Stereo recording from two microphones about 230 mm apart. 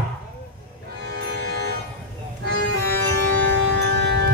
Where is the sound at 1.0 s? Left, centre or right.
Right.